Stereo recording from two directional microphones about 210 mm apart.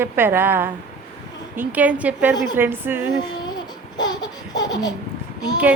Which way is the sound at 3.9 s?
20° left (ahead or behind).